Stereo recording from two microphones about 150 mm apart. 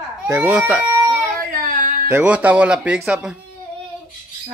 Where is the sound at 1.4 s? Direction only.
65° right (ahead or behind).